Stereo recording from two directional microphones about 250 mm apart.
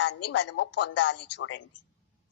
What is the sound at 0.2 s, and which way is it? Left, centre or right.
Speech, left.